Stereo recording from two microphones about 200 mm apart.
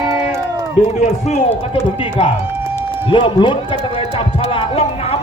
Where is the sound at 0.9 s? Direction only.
35° left (ahead or behind).